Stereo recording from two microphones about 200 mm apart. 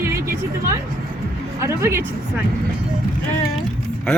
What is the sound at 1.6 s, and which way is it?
Speech, 15° right (ahead or behind).